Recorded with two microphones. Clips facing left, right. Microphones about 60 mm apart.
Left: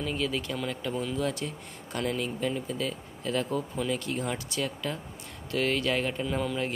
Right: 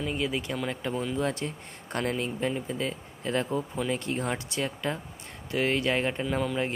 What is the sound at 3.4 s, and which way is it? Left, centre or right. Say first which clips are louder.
Speech: right 1 dB; centre.